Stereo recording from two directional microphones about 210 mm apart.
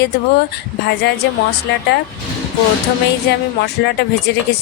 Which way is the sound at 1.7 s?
55° left (ahead or behind).